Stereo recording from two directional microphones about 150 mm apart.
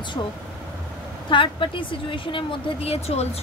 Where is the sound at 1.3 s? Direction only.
35° left (ahead or behind).